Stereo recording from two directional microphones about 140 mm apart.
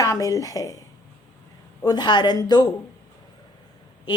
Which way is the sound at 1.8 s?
30° left (ahead or behind).